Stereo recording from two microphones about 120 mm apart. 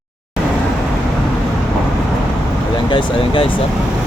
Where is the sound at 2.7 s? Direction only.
45° left (ahead or behind).